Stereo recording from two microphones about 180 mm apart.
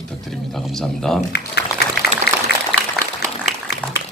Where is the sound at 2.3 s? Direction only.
60° left (ahead or behind).